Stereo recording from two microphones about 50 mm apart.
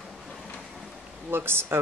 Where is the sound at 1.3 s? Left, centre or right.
Right.